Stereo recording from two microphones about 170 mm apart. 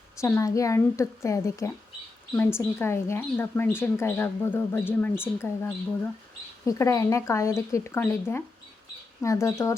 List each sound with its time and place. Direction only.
0.2 s a woman's voice: 15° left (ahead or behind)